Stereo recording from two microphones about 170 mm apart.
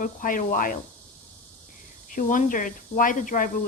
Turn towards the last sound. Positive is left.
turn(degrees=50)  # may be behind; listen again after turning